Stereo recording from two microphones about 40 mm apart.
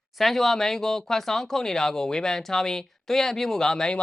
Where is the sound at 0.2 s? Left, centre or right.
Centre.